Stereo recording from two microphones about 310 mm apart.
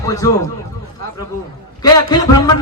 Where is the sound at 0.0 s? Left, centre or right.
Centre.